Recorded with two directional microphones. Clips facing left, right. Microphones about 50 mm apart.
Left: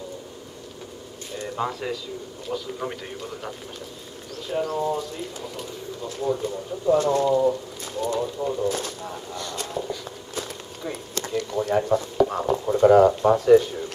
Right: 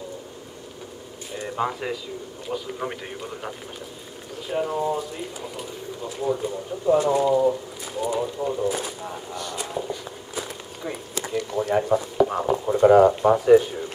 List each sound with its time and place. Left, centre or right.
1.3 s bird: right
2.5 s a man's voice: right